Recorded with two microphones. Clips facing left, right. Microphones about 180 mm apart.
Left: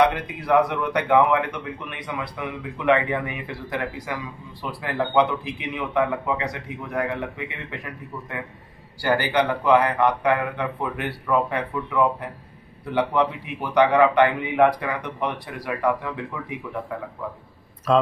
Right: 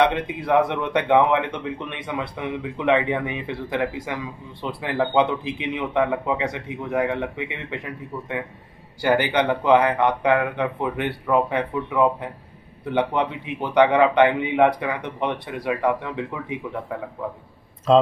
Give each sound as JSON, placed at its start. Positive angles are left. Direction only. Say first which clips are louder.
{"t": 0.0, "sound": "speech", "louder": "even", "side_deg": -25}
{"t": 17.9, "sound": "speech", "louder": "right 4 dB", "side_deg": -25}